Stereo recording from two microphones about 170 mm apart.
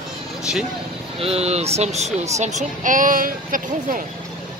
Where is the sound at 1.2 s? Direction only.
35° right (ahead or behind); by 4.0 s 55° right (ahead or behind).